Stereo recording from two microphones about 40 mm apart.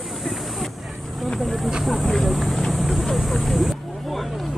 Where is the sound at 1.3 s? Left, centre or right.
Centre.